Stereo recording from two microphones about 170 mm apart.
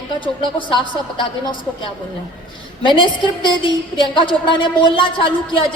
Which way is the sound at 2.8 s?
30° left (ahead or behind).